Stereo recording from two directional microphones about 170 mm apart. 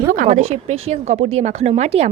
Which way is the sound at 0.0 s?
55° right (ahead or behind).